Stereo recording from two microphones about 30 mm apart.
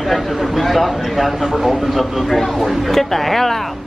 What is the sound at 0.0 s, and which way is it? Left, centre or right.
Speech, centre.